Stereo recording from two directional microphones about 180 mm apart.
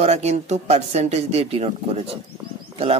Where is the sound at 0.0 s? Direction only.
35° right (ahead or behind).